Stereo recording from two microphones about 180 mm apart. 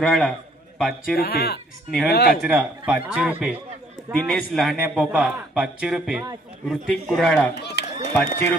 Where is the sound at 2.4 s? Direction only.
10° right (ahead or behind).